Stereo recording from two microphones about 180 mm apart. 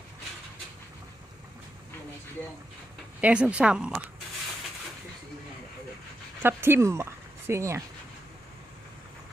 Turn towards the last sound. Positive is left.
turn(degrees=-15)  # may be behind; listen again after turning